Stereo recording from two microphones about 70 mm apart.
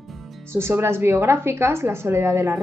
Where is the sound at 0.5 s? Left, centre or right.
Right.